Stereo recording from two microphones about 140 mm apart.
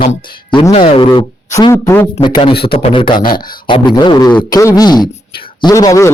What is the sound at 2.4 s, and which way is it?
Speech, 40° left (ahead or behind).